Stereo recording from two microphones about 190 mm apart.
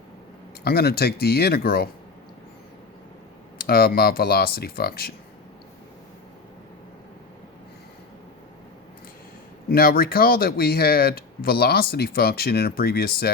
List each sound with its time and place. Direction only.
0.6 s speech: 55° left (ahead or behind)
3.6 s speech: 55° left (ahead or behind)
9.6 s speech: 50° left (ahead or behind)